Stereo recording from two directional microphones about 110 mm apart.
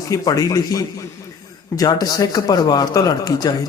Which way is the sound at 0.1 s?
35° left (ahead or behind).